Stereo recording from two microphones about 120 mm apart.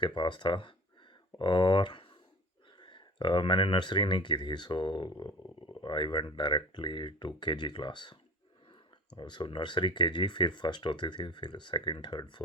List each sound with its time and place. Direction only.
0.0 s speech: 40° left (ahead or behind)